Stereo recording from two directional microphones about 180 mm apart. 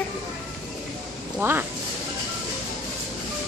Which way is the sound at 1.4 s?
10° right (ahead or behind).